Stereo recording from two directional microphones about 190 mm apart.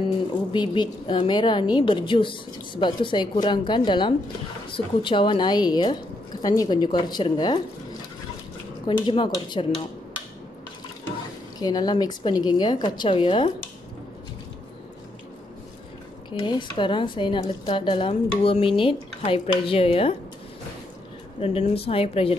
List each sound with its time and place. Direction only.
0.5 s a woman's voice: 25° left (ahead or behind)
8.8 s a woman's voice: 25° left (ahead or behind)
11.6 s a woman's voice: 20° left (ahead or behind)
16.3 s a woman's voice: 25° left (ahead or behind)
21.4 s a woman's voice: 30° left (ahead or behind)